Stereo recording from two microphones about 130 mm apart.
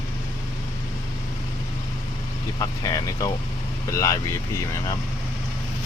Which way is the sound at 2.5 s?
30° left (ahead or behind).